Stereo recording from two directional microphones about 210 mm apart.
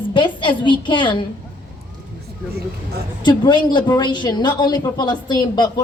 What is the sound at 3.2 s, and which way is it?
Speech, 20° left (ahead or behind).